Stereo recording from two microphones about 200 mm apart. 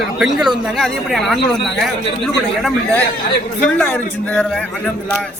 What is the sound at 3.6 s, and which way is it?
A man's voice, 5° left (ahead or behind).